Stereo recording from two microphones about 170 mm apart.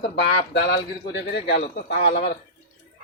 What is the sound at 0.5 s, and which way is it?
A man's voice, 80° left.